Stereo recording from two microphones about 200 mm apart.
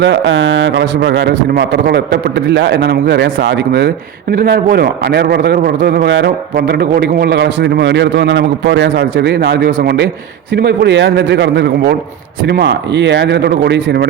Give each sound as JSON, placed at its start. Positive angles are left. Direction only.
{"t": 0.0, "sound": "a man's voice", "side_deg": -65}